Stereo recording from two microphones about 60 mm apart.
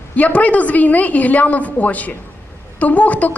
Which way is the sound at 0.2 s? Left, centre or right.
Left.